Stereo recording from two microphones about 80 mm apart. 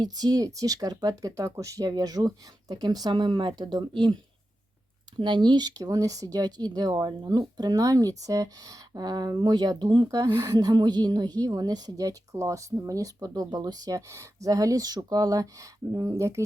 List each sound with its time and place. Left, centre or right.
0.0 s speech: right
5.1 s speech: right
14.1 s speech: right